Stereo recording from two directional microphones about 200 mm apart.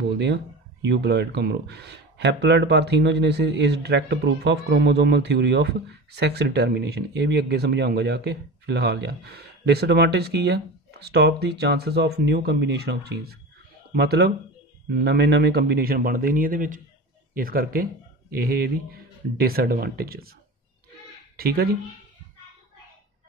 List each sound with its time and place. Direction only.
0.8 s speech: 55° right (ahead or behind)
21.4 s speech: 50° right (ahead or behind)